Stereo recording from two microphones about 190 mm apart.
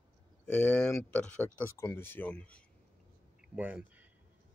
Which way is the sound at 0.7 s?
5° left (ahead or behind).